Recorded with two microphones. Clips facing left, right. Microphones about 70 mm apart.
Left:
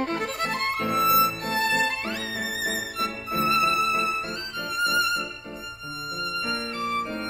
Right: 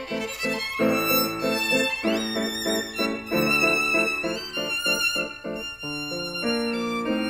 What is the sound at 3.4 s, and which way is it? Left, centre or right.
Music, left.